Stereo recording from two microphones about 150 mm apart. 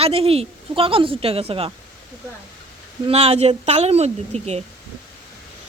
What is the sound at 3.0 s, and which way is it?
A woman's voice, 45° right (ahead or behind).